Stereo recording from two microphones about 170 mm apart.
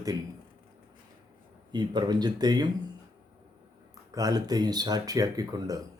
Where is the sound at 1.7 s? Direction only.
25° right (ahead or behind).